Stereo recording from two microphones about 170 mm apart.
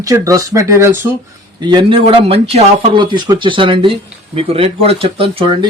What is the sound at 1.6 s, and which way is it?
Speech, 25° right (ahead or behind).